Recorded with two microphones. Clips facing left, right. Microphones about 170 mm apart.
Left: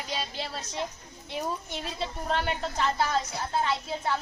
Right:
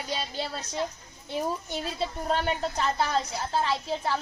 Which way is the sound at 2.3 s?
35° right (ahead or behind).